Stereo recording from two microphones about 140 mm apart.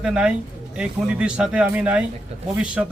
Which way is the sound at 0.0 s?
5° right (ahead or behind).